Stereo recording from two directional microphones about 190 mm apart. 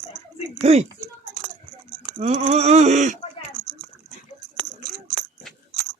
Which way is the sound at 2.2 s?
35° right (ahead or behind).